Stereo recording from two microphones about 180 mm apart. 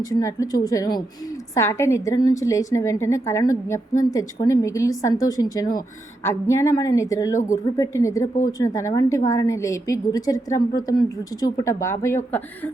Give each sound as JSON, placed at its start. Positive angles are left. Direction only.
{"t": 0.0, "sound": "a woman's voice", "side_deg": 20}